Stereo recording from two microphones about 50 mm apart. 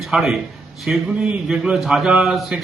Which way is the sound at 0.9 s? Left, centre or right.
Right.